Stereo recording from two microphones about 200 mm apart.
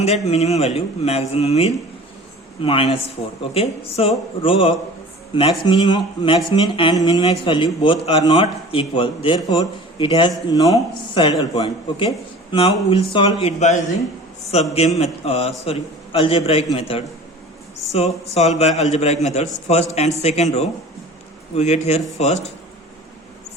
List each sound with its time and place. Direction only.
0.0 s speech: 30° left (ahead or behind)
14.9 s speech: 30° left (ahead or behind)
18.3 s speech: 30° left (ahead or behind)